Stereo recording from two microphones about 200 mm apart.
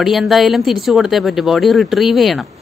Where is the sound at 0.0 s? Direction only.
Centre (ahead or behind).